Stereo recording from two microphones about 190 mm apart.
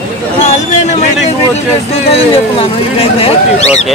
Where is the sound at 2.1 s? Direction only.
30° left (ahead or behind).